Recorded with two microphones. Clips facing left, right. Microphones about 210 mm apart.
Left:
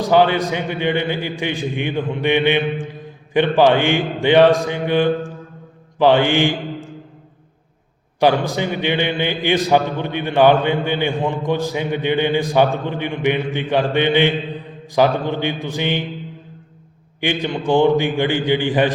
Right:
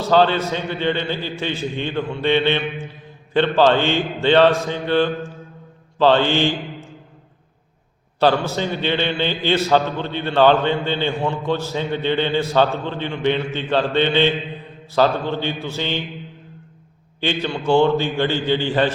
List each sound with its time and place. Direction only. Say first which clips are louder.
0.0 s a man's voice: left 2 dB; 15° left (ahead or behind)
8.2 s a man's voice: left 1 dB; 15° left (ahead or behind)
17.2 s a man's voice: left 2 dB; 15° left (ahead or behind)